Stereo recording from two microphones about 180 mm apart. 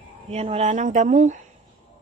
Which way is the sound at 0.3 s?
35° right (ahead or behind).